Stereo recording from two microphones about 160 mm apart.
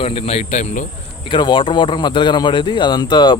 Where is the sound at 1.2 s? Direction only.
30° left (ahead or behind).